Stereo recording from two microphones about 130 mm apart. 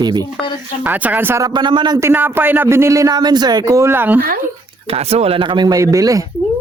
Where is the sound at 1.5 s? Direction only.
35° right (ahead or behind).